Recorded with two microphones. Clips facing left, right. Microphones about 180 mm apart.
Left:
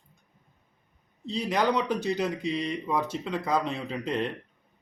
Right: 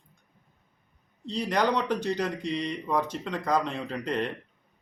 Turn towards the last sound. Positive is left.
turn(degrees=5)  # may be behind; listen again after turning